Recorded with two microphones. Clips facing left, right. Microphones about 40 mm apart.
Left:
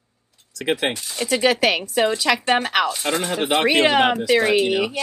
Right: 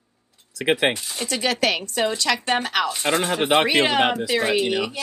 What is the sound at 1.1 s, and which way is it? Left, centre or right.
A woman's voice, centre.